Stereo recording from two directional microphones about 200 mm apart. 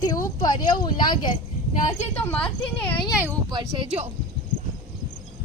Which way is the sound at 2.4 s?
5° left (ahead or behind).